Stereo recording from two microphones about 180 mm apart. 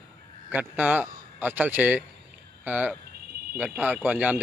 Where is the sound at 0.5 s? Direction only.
10° right (ahead or behind).